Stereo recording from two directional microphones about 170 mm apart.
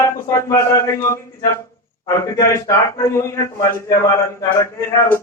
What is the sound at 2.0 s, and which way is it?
A man's voice, 20° left (ahead or behind).